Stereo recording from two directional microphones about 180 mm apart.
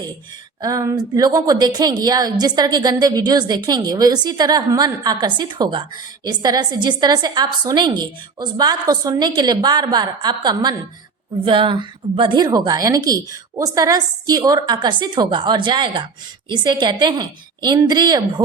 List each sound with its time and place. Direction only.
0.6 s a woman's voice: 20° right (ahead or behind)